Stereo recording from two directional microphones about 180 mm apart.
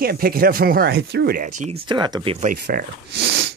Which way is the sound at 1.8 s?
25° right (ahead or behind).